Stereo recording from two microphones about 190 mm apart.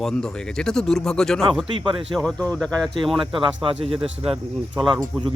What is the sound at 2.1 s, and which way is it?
Speech, 5° left (ahead or behind).